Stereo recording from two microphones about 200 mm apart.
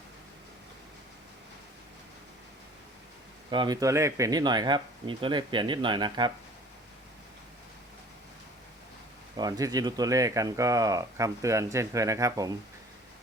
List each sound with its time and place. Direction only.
3.5 s speech: 20° right (ahead or behind)
9.4 s speech: 20° right (ahead or behind)